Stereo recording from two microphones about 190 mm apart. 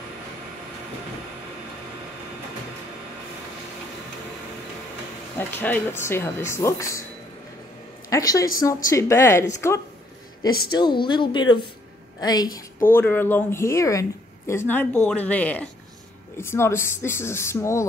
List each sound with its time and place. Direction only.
5.4 s speech: 10° left (ahead or behind)
8.1 s a woman's voice: 20° left (ahead or behind)